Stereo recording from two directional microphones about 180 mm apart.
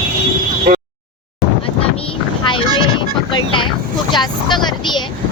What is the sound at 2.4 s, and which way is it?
Boat, 30° left (ahead or behind).